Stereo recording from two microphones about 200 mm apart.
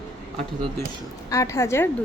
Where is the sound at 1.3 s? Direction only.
15° left (ahead or behind).